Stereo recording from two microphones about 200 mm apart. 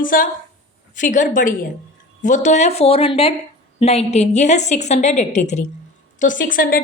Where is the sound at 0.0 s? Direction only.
45° left (ahead or behind).